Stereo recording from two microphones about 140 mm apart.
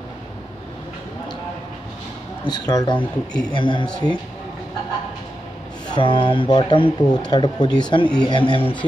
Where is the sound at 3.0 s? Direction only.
5° left (ahead or behind).